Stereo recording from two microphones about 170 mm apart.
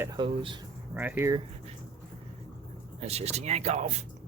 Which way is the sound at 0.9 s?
10° right (ahead or behind).